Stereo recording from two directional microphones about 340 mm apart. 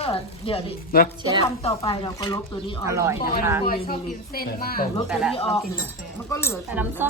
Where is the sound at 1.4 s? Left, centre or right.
Centre.